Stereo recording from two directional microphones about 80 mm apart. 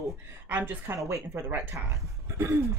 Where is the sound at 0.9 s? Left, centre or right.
Right.